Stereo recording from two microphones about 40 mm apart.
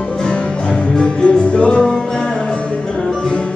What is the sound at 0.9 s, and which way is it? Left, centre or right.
Music, left.